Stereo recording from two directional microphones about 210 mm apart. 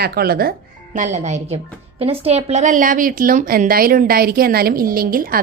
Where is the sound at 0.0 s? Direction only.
45° right (ahead or behind).